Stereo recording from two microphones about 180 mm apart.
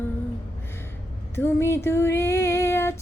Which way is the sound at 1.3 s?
15° left (ahead or behind).